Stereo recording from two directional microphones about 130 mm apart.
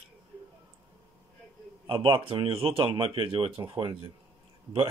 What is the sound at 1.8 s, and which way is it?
Speech, 40° right (ahead or behind).